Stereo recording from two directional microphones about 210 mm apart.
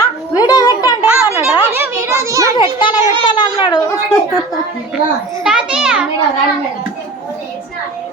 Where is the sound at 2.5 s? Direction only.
20° left (ahead or behind).